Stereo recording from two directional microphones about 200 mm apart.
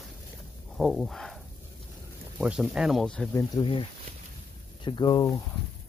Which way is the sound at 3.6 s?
25° left (ahead or behind).